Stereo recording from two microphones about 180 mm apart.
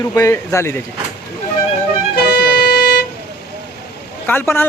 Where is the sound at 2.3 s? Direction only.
65° left (ahead or behind).